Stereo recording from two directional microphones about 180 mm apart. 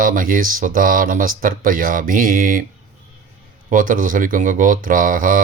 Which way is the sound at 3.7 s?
50° right (ahead or behind).